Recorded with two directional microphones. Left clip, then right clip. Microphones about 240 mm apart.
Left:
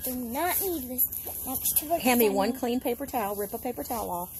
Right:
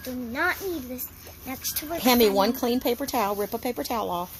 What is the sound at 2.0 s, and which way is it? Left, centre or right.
Speech, centre.